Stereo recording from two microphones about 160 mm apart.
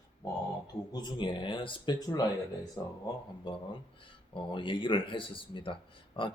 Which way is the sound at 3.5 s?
30° left (ahead or behind).